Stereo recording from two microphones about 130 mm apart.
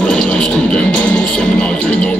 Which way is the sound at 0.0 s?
10° left (ahead or behind).